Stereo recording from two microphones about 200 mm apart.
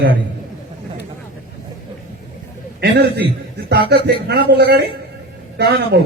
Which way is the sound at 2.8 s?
55° right (ahead or behind).